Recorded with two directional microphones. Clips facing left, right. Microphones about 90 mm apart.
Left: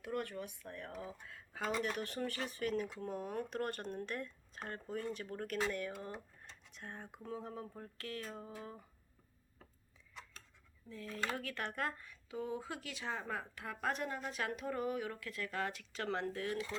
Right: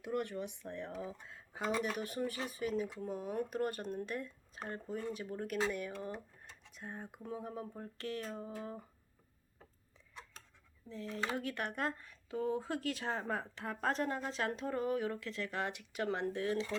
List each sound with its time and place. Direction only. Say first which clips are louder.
0.0 s speech: right 3 dB; 20° right (ahead or behind)
10.8 s speech: right 2 dB; 20° right (ahead or behind)